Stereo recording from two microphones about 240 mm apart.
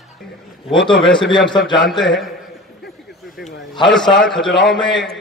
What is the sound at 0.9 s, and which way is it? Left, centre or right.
A man's voice, centre.